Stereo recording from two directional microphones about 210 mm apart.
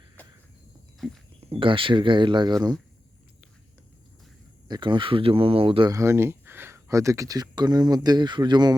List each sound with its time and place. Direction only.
1.5 s speech: 25° right (ahead or behind)
4.7 s speech: 20° right (ahead or behind)